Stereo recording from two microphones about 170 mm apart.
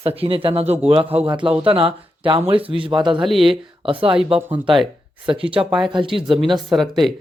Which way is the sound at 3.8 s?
30° right (ahead or behind).